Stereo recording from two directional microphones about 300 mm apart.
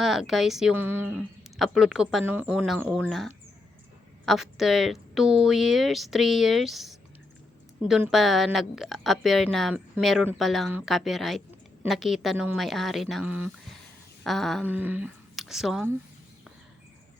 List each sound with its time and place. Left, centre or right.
0.0 s speech: centre